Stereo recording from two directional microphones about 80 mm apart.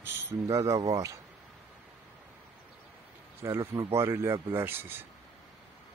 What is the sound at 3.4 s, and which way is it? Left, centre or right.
Speech, right.